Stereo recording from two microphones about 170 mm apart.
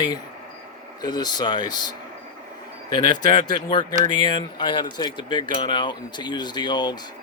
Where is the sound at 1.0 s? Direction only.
25° left (ahead or behind).